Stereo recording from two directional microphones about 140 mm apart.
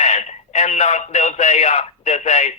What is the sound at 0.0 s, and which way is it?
Speech, 50° left (ahead or behind).